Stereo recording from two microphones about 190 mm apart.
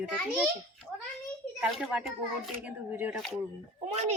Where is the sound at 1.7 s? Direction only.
Centre (ahead or behind).